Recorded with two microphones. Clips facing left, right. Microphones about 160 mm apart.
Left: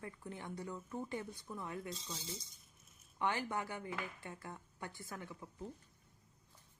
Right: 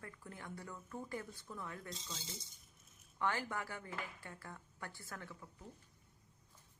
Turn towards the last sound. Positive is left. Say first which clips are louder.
# left 3 dB
turn(degrees=20)  # may be behind; listen again after turning